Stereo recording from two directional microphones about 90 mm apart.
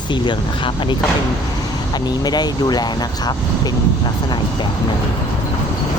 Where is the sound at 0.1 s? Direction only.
65° left (ahead or behind).